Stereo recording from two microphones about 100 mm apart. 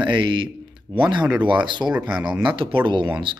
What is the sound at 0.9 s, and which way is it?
Speech, centre (ahead or behind).